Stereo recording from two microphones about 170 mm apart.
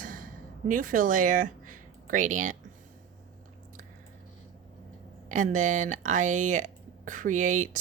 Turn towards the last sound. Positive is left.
turn(degrees=-45)  # may be behind; listen again after turning